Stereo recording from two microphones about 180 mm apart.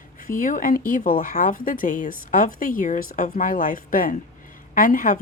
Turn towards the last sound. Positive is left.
turn(degrees=50)  # may be behind; listen again after turning